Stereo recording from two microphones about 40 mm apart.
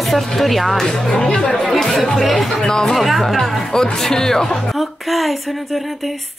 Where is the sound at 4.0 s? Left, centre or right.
Centre.